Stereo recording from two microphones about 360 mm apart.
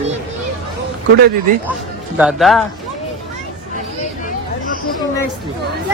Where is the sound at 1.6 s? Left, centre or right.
Centre.